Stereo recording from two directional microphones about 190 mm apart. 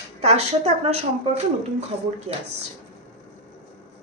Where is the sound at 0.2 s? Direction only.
35° right (ahead or behind).